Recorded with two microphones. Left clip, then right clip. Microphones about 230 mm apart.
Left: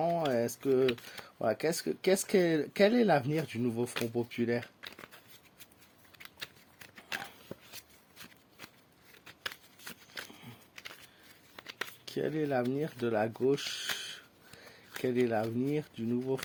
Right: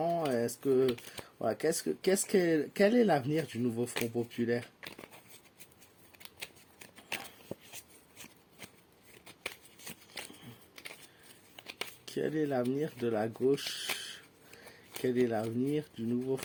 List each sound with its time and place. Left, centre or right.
0.3 s typing: centre
0.7 s speech: centre
11.5 s speech: centre